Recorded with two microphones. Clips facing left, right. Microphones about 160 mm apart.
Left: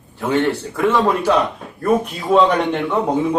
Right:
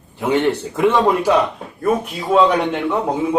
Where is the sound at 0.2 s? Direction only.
20° right (ahead or behind).